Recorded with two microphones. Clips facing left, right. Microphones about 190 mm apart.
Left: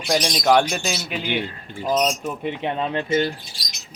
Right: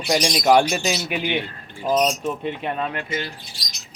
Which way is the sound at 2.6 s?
25° left (ahead or behind).